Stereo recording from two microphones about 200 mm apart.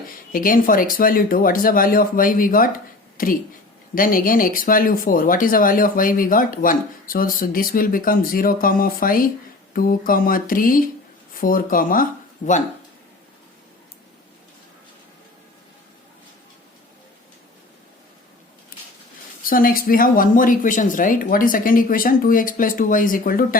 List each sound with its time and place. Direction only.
0.3 s speech: 45° left (ahead or behind)
19.5 s speech: 45° left (ahead or behind)